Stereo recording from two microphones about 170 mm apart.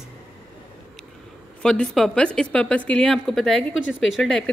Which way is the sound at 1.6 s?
5° left (ahead or behind).